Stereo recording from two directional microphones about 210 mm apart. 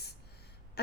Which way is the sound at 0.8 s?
50° left (ahead or behind).